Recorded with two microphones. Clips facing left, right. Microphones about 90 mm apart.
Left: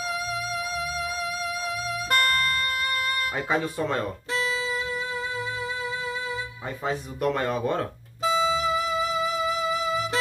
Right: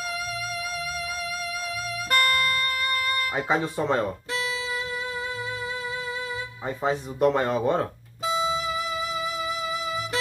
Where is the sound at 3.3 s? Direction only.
15° right (ahead or behind).